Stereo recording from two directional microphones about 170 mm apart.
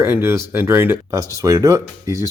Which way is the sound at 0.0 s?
15° right (ahead or behind).